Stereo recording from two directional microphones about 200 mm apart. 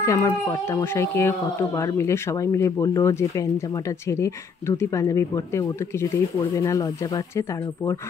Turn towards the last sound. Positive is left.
turn(degrees=15)  # may be behind; listen again after turning